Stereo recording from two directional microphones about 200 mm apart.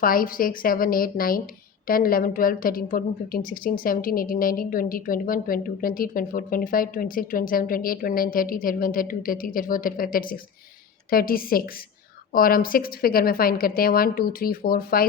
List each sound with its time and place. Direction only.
0.0 s a woman's voice: 45° left (ahead or behind)